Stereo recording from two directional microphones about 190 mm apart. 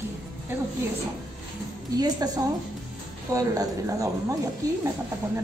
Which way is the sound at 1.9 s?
20° right (ahead or behind).